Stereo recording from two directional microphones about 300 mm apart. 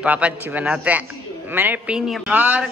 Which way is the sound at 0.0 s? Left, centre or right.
Centre.